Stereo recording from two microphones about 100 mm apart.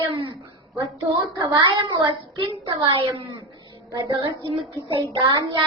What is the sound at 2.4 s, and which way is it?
Speech, 60° right (ahead or behind).